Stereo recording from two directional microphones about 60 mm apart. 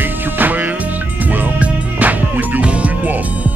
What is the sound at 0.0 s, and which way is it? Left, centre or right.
Music, right.